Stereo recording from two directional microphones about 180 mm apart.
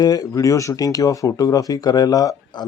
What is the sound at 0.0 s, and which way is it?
Speech, 20° left (ahead or behind).